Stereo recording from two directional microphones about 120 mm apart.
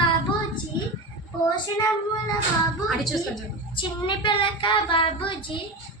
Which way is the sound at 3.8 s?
40° left (ahead or behind).